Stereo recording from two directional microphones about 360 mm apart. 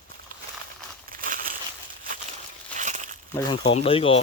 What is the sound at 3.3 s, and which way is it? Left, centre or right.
Speech, centre.